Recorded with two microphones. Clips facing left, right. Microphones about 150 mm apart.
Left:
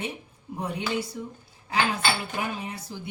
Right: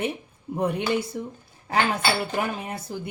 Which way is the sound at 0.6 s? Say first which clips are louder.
Right 5 dB; 55° right (ahead or behind).